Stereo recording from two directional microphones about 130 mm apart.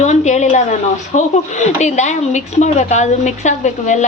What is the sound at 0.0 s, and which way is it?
A woman's voice, 65° left (ahead or behind).